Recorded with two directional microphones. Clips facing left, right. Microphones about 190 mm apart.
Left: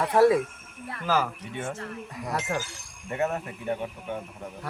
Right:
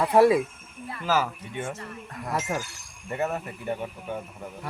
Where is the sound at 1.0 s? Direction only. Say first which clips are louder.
Right 1 dB; 5° right (ahead or behind).